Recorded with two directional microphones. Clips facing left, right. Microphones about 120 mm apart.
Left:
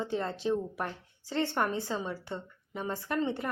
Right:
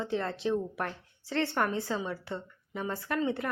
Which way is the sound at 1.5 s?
10° left (ahead or behind).